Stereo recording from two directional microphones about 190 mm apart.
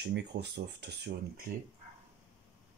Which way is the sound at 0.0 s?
65° right (ahead or behind).